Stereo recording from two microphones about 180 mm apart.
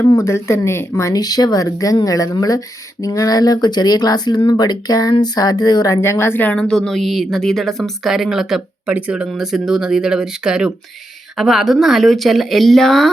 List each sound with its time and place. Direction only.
0.1 s speech: 15° left (ahead or behind)